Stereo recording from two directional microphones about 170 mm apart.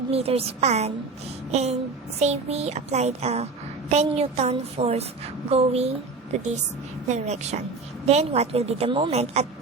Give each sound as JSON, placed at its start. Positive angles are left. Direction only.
{"t": 0.1, "sound": "a child's voice", "side_deg": -35}
{"t": 7.1, "sound": "a child's voice", "side_deg": -40}